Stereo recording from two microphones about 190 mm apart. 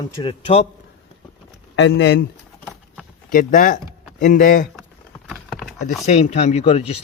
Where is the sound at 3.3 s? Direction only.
45° left (ahead or behind).